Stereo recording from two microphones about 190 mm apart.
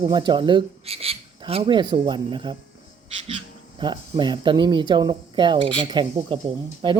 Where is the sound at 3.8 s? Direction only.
25° right (ahead or behind).